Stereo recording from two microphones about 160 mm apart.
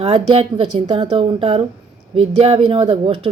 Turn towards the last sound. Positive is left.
turn(degrees=-30)  # may be behind; listen again after turning